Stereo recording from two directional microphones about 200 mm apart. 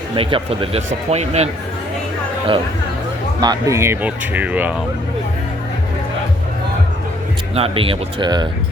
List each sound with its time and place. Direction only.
0.2 s speech: 25° right (ahead or behind)
3.4 s speech: 15° right (ahead or behind)
7.5 s speech: 30° right (ahead or behind)